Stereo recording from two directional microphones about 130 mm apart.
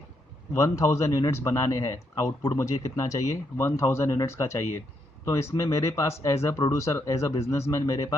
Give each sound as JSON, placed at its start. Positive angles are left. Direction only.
{"t": 0.5, "sound": "a man's voice", "side_deg": 25}